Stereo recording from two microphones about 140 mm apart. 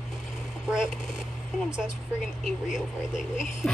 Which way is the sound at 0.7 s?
5° right (ahead or behind).